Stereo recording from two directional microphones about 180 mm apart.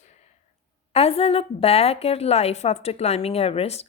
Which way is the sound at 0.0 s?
40° left (ahead or behind).